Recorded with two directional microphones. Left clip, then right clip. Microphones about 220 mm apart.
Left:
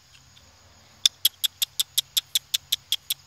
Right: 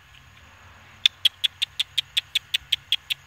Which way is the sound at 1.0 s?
25° left (ahead or behind).